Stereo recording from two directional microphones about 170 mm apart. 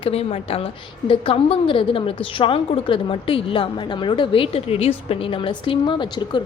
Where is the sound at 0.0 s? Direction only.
35° left (ahead or behind).